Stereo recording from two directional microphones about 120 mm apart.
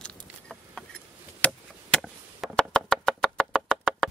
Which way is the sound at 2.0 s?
5° right (ahead or behind).